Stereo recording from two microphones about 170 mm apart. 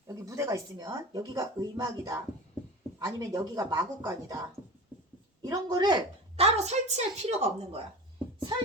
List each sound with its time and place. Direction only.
0.1 s speech: 20° right (ahead or behind)
4.9 s a sound: 10° right (ahead or behind)
5.4 s a woman's voice: 20° right (ahead or behind); by 7.8 s 40° right (ahead or behind)
8.4 s beatboxing: 30° right (ahead or behind)